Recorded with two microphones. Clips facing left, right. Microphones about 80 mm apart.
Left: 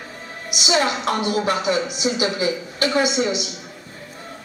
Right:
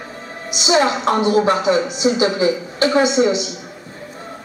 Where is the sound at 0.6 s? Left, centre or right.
Right.